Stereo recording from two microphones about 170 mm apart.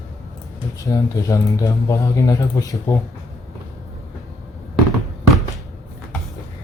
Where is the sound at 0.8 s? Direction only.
20° left (ahead or behind).